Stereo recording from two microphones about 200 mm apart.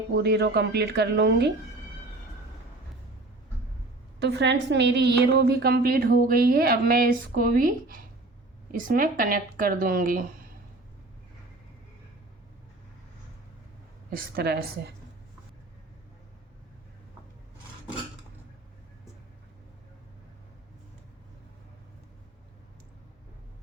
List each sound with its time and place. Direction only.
0.2 s a woman's voice: 55° right (ahead or behind)
4.2 s a woman's voice: 60° right (ahead or behind)
14.1 s a woman's voice: 50° right (ahead or behind)